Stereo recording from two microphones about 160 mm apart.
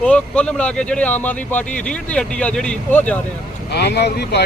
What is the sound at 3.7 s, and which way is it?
Speech, 90° left.